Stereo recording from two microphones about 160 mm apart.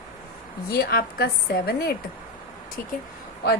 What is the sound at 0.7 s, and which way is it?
A woman's voice, 70° left (ahead or behind).